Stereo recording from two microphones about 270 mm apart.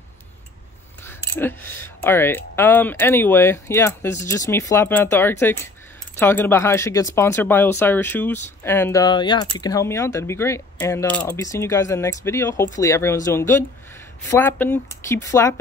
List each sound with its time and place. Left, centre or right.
1.4 s speech: centre